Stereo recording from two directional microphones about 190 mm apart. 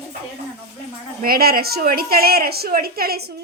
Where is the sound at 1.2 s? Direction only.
50° right (ahead or behind).